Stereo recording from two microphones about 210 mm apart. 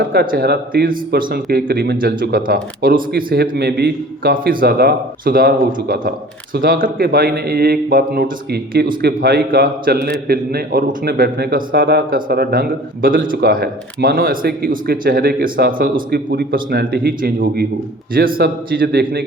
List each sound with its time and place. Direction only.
0.1 s speech: 45° right (ahead or behind)